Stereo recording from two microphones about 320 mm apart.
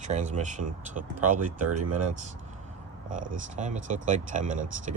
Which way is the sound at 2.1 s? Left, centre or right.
Right.